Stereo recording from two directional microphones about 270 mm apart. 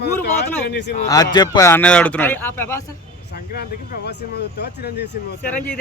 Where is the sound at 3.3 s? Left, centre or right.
Left.